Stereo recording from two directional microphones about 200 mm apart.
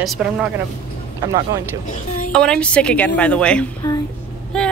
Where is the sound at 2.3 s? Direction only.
5° left (ahead or behind).